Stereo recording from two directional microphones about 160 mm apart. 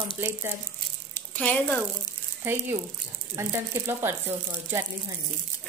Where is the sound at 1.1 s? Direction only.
10° left (ahead or behind).